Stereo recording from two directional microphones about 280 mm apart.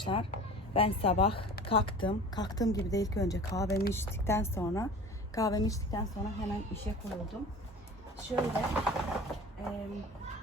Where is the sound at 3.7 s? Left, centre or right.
Left.